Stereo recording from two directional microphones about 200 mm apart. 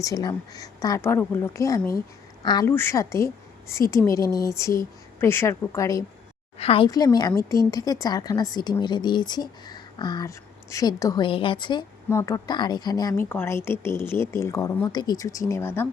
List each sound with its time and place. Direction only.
0.0 s a woman's voice: 20° left (ahead or behind)
6.6 s a woman's voice: 30° left (ahead or behind); by 15.9 s 10° left (ahead or behind)